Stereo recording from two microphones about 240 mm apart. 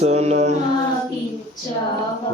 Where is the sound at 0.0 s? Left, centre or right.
Right.